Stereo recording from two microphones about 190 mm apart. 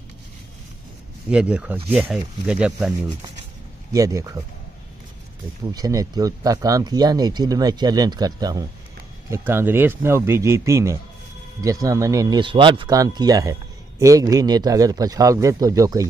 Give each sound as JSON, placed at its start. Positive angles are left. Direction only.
{"t": 1.3, "sound": "speech", "side_deg": -5}
{"t": 3.9, "sound": "speech", "side_deg": -15}
{"t": 5.7, "sound": "speech", "side_deg": -20}